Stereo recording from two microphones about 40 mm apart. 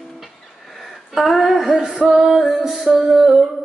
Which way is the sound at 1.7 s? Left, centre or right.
Centre.